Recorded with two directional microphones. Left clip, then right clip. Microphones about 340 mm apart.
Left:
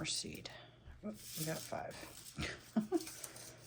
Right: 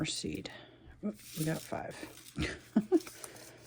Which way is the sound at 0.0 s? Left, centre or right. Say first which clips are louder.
Right 5 dB; right.